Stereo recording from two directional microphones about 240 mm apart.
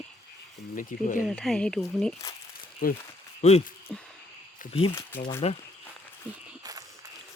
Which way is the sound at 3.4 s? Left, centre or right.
Left.